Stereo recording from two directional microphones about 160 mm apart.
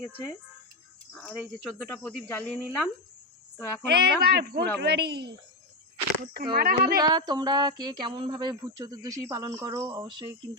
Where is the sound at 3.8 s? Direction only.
90° right.